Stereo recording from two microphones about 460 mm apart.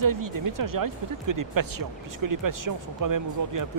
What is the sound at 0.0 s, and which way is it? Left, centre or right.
Speech, right.